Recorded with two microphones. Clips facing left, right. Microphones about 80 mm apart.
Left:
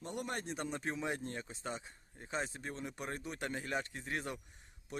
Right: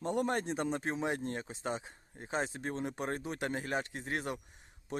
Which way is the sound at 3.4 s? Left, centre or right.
Right.